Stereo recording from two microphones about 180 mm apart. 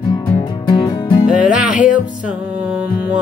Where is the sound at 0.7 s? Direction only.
25° left (ahead or behind).